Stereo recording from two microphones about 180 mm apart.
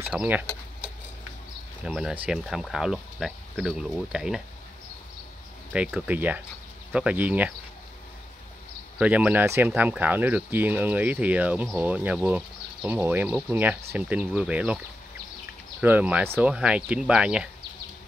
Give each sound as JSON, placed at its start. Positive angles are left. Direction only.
{"t": 0.1, "sound": "speech", "side_deg": -5}
{"t": 1.9, "sound": "speech", "side_deg": -5}
{"t": 5.7, "sound": "speech", "side_deg": -5}
{"t": 8.9, "sound": "speech", "side_deg": -5}
{"t": 15.8, "sound": "speech", "side_deg": -10}